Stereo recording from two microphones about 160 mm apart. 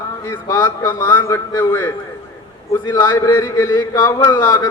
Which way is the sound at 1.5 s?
25° left (ahead or behind).